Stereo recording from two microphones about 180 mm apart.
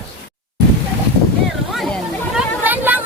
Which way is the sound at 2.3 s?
10° right (ahead or behind).